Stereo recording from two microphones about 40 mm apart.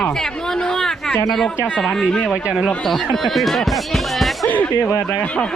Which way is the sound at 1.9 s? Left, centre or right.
Centre.